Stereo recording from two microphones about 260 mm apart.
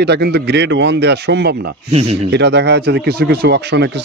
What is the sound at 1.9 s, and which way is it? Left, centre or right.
Speech, right.